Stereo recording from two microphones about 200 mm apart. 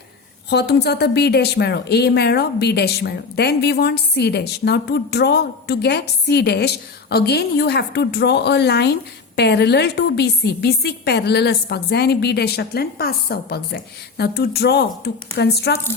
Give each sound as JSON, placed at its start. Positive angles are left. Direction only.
{"t": 0.5, "sound": "a woman's voice", "side_deg": 55}